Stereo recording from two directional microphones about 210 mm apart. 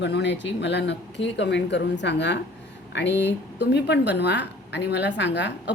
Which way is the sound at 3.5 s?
55° left (ahead or behind).